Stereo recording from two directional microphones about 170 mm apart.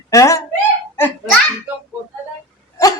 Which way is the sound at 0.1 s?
20° left (ahead or behind).